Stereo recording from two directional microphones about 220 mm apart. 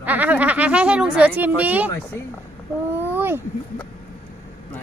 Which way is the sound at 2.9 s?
10° right (ahead or behind).